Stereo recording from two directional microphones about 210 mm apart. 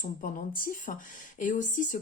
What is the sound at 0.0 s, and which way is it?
Speech, 40° left (ahead or behind).